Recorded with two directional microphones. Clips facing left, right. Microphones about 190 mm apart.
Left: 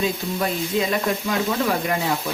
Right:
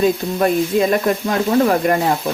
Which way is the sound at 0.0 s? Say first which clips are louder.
Right 8 dB; 50° right (ahead or behind).